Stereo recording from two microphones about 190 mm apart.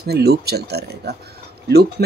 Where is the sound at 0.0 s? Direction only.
55° right (ahead or behind).